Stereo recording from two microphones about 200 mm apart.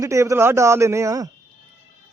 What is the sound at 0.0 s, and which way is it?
A man's voice, 15° right (ahead or behind).